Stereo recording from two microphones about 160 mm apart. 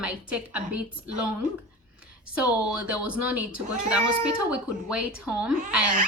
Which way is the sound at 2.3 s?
5° right (ahead or behind).